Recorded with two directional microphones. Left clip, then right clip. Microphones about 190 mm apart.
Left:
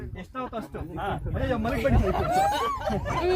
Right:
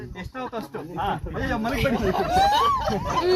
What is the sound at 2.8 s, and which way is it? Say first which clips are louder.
Speech: right 4 dB; 20° left (ahead or behind).